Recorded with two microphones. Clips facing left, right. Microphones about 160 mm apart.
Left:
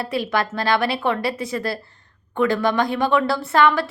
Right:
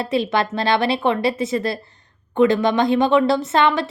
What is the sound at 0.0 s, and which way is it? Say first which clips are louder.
A woman's voice: right 3 dB; 20° right (ahead or behind).